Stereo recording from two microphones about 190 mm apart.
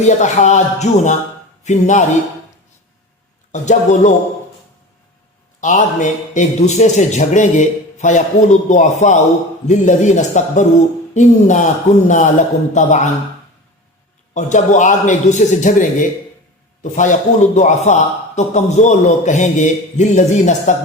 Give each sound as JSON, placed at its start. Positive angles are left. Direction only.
{"t": 0.0, "sound": "a man's voice", "side_deg": 40}
{"t": 3.5, "sound": "a man's voice", "side_deg": 40}
{"t": 5.5, "sound": "a man's voice", "side_deg": 40}
{"t": 14.3, "sound": "a man's voice", "side_deg": 40}